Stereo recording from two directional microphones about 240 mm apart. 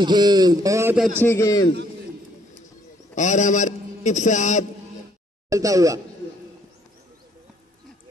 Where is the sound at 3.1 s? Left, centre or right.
Left.